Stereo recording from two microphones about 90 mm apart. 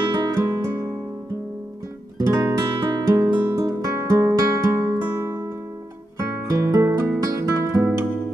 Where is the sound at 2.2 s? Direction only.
40° right (ahead or behind).